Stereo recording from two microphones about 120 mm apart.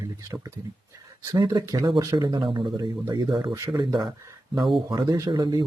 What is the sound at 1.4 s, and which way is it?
Speech, 30° right (ahead or behind).